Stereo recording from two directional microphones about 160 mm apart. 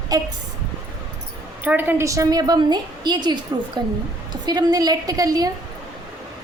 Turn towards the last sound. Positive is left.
turn(degrees=-25)  # may be behind; listen again after turning